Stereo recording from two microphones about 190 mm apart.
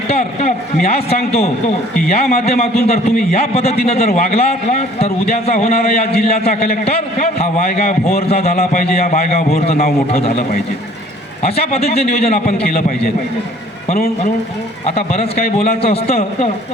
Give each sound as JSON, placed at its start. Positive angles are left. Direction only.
{"t": 0.2, "sound": "a man's voice", "side_deg": 35}
{"t": 11.7, "sound": "a man's voice", "side_deg": 35}
{"t": 14.8, "sound": "a man's voice", "side_deg": 35}